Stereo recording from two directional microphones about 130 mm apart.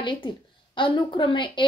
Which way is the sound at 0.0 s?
40° left (ahead or behind).